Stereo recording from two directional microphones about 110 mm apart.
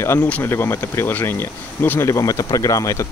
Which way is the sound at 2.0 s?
30° left (ahead or behind).